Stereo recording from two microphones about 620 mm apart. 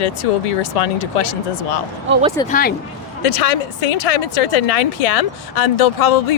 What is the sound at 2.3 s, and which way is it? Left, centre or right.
Speech, centre.